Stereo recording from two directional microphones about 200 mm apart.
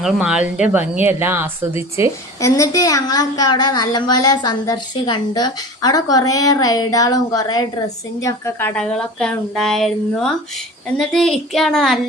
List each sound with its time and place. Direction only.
0.0 s a woman's voice: centre (ahead or behind)
2.4 s a woman's voice: 15° left (ahead or behind)